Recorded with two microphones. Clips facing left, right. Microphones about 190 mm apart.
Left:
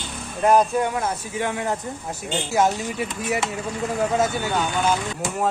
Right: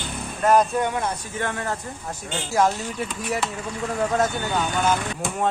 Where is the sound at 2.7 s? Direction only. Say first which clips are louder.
Left 2 dB; 15° left (ahead or behind).